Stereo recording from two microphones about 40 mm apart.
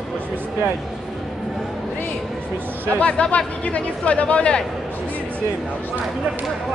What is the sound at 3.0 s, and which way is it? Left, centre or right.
Speech, left.